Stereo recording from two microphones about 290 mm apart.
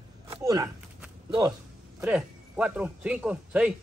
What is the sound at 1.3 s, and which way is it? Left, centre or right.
A man's voice, centre.